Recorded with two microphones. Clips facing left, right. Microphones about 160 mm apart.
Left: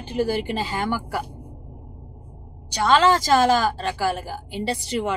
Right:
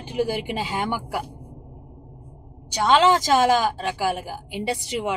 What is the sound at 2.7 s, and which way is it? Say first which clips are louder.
A woman's voice: even; 15° right (ahead or behind).